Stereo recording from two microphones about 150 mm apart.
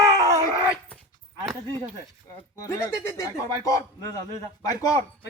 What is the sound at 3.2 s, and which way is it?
Speech, 20° left (ahead or behind).